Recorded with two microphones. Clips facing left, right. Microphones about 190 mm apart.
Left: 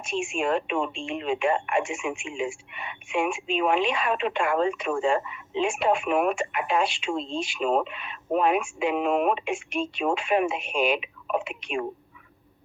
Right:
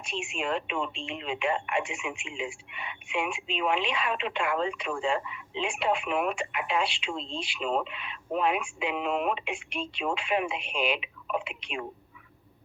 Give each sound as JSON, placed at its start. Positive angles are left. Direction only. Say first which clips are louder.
{"t": 0.0, "sound": "speech", "louder": "left 6 dB", "side_deg": 45}